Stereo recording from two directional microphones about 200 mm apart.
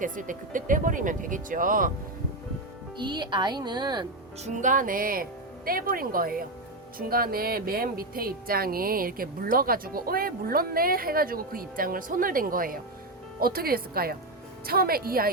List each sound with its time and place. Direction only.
0.0 s speech: 40° right (ahead or behind)
3.0 s speech: 20° right (ahead or behind)
4.4 s speech: 40° right (ahead or behind)